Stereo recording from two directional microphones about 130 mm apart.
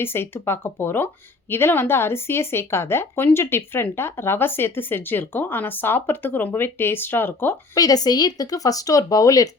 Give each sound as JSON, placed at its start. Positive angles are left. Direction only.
{"t": 0.0, "sound": "speech", "side_deg": 20}
{"t": 7.8, "sound": "speech", "side_deg": 30}